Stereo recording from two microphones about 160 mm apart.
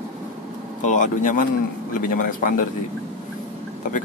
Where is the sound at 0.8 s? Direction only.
50° left (ahead or behind).